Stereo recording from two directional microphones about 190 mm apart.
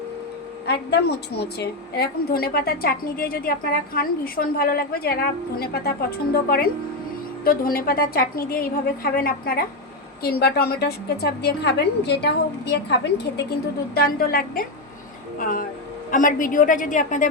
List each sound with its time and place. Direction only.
0.7 s a woman's voice: 60° left (ahead or behind); by 17.2 s 40° left (ahead or behind)